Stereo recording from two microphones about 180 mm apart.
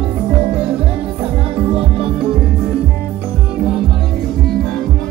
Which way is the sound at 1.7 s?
30° right (ahead or behind).